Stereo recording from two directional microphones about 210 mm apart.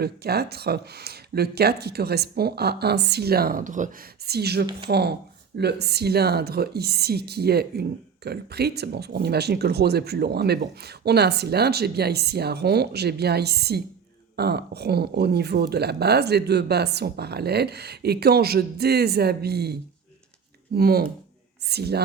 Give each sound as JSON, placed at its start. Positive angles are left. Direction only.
{"t": 0.0, "sound": "a woman's voice", "side_deg": -50}
{"t": 20.7, "sound": "a woman's voice", "side_deg": -45}